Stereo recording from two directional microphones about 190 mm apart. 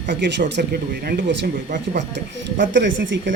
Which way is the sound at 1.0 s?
55° right (ahead or behind).